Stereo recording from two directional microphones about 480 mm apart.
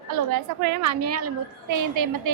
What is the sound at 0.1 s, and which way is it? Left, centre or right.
A woman's voice, right.